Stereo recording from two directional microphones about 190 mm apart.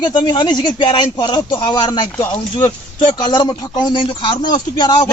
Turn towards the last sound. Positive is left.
turn(degrees=25)  # may be behind; listen again after turning